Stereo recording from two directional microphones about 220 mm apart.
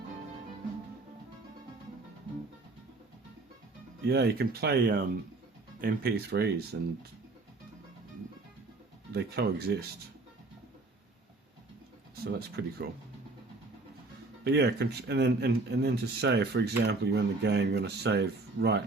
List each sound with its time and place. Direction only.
4.0 s a man's voice: 45° right (ahead or behind)
9.1 s a man's voice: 50° right (ahead or behind)
12.2 s a man's voice: 45° right (ahead or behind)
14.4 s a man's voice: 50° right (ahead or behind)